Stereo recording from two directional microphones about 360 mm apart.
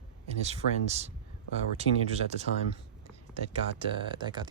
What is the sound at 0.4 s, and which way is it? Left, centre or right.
Speech, centre.